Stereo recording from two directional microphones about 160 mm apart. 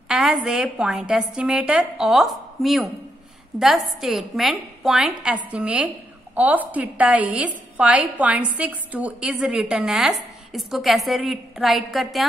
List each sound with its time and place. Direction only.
0.1 s a woman's voice: 5° right (ahead or behind)